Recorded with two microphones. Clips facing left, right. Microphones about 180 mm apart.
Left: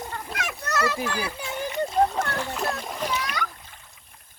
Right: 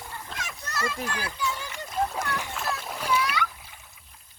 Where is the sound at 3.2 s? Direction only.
45° left (ahead or behind).